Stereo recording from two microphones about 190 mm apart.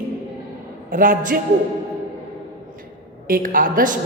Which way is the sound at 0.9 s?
45° right (ahead or behind).